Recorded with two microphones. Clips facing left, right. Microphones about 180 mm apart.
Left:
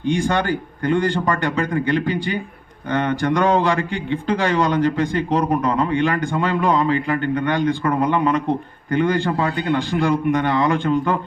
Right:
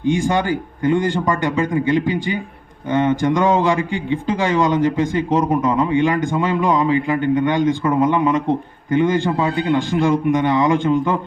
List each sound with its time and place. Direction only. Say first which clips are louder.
0.1 s a man's voice: right 1 dB; 15° right (ahead or behind)